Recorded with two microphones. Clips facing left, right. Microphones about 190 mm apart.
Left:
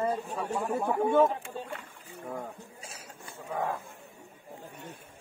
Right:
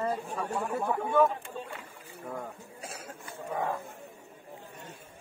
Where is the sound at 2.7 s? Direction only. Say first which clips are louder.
Right 5 dB; 55° right (ahead or behind).